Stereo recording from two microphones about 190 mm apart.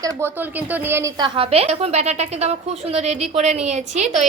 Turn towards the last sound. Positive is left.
turn(degrees=-35)  # may be behind; listen again after turning